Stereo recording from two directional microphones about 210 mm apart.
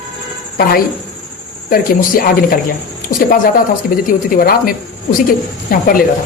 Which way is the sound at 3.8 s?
40° left (ahead or behind).